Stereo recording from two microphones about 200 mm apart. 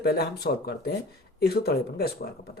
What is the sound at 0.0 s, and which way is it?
Speech, 50° left (ahead or behind).